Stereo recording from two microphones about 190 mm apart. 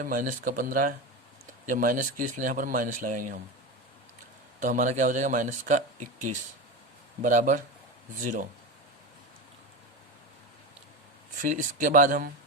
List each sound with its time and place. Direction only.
0.0 s speech: 45° right (ahead or behind)
4.6 s speech: 40° right (ahead or behind)
11.3 s speech: 40° right (ahead or behind)